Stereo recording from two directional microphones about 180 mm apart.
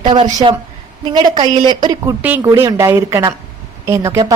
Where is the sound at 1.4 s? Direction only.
25° right (ahead or behind).